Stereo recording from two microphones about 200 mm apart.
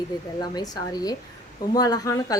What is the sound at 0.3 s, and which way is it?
A woman's voice, 20° left (ahead or behind).